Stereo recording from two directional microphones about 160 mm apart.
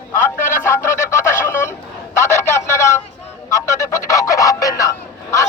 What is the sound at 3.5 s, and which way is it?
Music, 20° left (ahead or behind).